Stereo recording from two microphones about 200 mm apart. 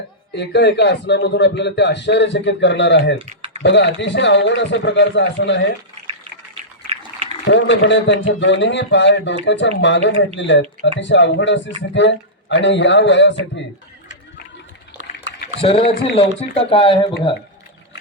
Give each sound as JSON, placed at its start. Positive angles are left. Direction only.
{"t": 0.3, "sound": "a man's voice", "side_deg": 60}
{"t": 3.2, "sound": "typing", "side_deg": -30}
{"t": 3.6, "sound": "a man's voice", "side_deg": 60}
{"t": 7.4, "sound": "a man's voice", "side_deg": 65}
{"t": 15.6, "sound": "speech", "side_deg": 30}